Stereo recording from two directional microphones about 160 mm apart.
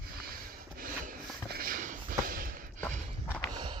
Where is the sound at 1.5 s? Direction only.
65° right (ahead or behind).